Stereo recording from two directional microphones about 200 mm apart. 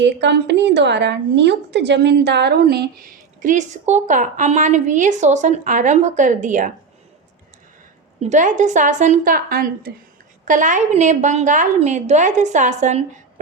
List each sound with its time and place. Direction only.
0.0 s a woman's voice: 60° right (ahead or behind); by 6.7 s 40° right (ahead or behind)
8.2 s a woman's voice: 35° right (ahead or behind)